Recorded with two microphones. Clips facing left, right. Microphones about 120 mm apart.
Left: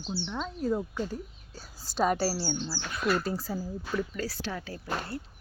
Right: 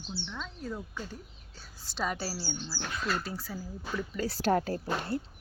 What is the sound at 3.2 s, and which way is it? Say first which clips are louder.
Speech: left 6 dB; 40° left (ahead or behind).